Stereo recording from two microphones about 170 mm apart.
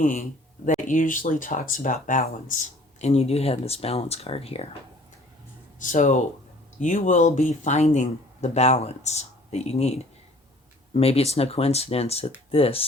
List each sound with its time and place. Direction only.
0.0 s speech: 50° left (ahead or behind)
3.0 s speech: 40° left (ahead or behind)
5.8 s speech: 50° left (ahead or behind)
10.9 s speech: 35° left (ahead or behind)